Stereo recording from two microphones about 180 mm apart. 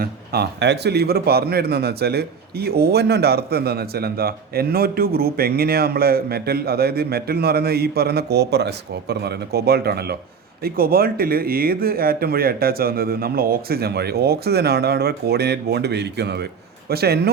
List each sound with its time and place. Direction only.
0.0 s a man's voice: 65° right (ahead or behind)